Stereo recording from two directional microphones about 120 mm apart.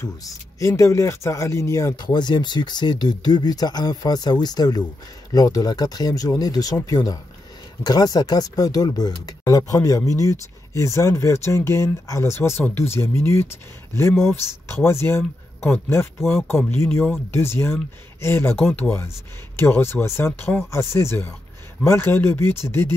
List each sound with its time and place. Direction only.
0.6 s speech: 25° left (ahead or behind)